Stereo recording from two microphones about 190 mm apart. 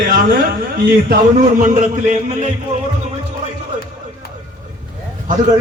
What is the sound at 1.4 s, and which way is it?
Speech, 45° right (ahead or behind).